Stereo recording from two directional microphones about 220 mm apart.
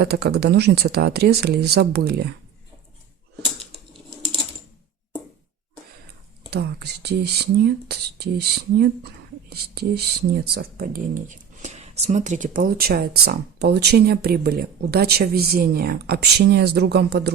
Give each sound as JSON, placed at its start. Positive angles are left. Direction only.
{"t": 0.0, "sound": "speech", "side_deg": -45}
{"t": 6.5, "sound": "speech", "side_deg": -50}